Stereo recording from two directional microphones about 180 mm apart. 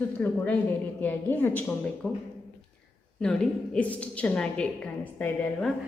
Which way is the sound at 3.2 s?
5° left (ahead or behind).